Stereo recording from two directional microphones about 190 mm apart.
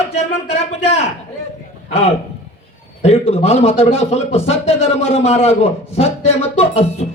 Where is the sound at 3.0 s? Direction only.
35° left (ahead or behind).